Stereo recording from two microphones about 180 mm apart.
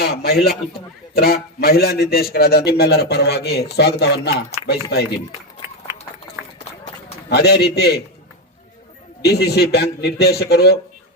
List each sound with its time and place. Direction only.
0.0 s a man's voice: 60° left (ahead or behind)
7.3 s a man's voice: 65° left (ahead or behind)
9.2 s a man's voice: 65° left (ahead or behind)